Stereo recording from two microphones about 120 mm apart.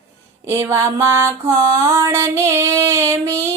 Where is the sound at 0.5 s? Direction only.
20° right (ahead or behind).